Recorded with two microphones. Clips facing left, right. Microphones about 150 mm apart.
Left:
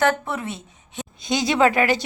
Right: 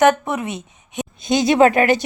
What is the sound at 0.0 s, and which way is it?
Speech, 20° right (ahead or behind).